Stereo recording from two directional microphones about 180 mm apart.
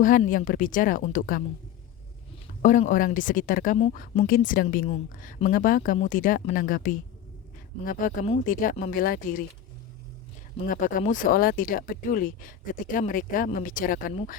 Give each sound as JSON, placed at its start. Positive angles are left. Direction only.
{"t": 0.3, "sound": "speech", "side_deg": 50}
{"t": 2.6, "sound": "speech", "side_deg": 45}
{"t": 10.7, "sound": "speech", "side_deg": 45}